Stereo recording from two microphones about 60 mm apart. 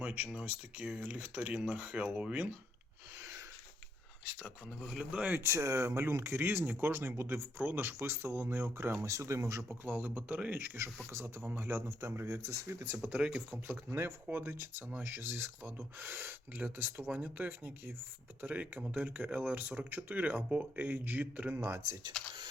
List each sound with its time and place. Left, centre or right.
0.0 s speech: right
4.9 s speech: right
5.3 s speech: right
9.0 s speech: right
9.6 s speech: right
11.1 s speech: right
13.1 s speech: centre
14.3 s speech: right